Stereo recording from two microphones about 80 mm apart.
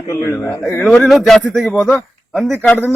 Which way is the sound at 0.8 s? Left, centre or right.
Centre.